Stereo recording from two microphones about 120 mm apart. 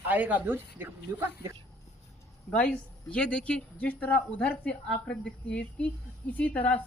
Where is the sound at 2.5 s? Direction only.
10° left (ahead or behind).